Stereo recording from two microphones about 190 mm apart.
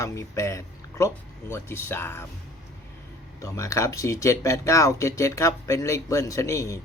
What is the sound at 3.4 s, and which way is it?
Speech, 15° left (ahead or behind).